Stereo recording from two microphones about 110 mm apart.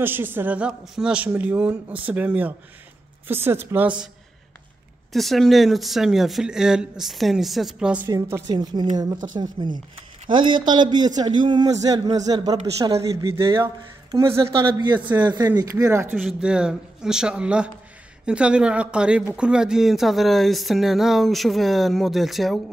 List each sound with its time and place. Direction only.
0.0 s speech: 20° right (ahead or behind)
5.1 s speech: centre (ahead or behind)
8.1 s a woman's voice: 35° right (ahead or behind)
13.4 s speech: 25° right (ahead or behind)
14.5 s a man's voice: 45° right (ahead or behind); by 16.2 s 25° right (ahead or behind)
16.2 s speech: 5° right (ahead or behind)